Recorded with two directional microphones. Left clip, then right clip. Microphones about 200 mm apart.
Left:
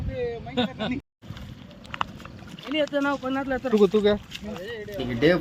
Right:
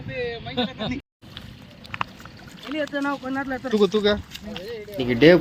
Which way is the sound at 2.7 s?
40° left (ahead or behind).